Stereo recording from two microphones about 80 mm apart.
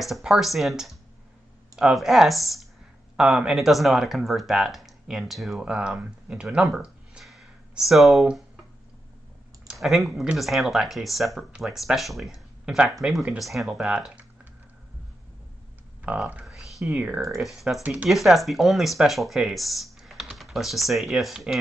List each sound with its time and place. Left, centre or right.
0.0 s speech: centre
5.7 s speech: centre
9.7 s speech: centre
16.1 s speech: centre
16.4 s a sound: centre
17.4 s speech: centre
17.8 s speech: centre
18.1 s speech: centre